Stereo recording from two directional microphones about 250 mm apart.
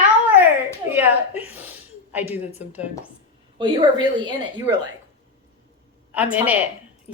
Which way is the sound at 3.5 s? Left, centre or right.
Centre.